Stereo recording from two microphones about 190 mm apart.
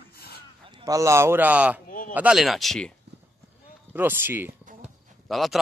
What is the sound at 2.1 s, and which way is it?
Speech, 5° right (ahead or behind).